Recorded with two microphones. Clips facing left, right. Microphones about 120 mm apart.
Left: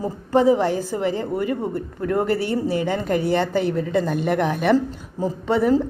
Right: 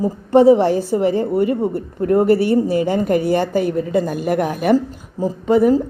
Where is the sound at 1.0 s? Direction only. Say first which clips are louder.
Right 6 dB; 20° right (ahead or behind).